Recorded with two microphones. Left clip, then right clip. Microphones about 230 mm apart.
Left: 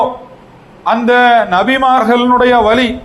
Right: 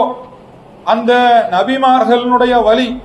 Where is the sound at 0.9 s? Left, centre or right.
Left.